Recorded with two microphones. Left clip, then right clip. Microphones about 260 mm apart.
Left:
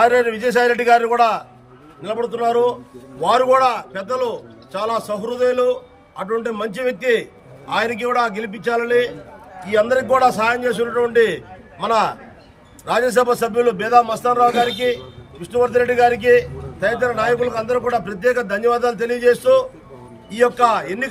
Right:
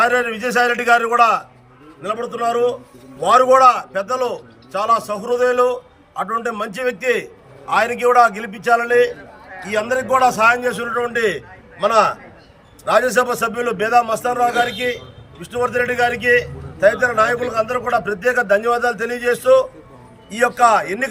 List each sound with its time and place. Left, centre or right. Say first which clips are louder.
0.0 s a man's voice: left 2 dB; centre
12.8 s a man's voice: right 1 dB; centre